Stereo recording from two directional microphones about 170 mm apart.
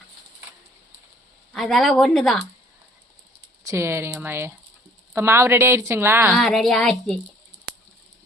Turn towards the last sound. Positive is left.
turn(degrees=0)  # may be behind; listen again after turning